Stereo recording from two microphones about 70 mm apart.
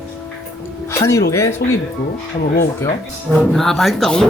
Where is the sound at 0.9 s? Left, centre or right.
Left.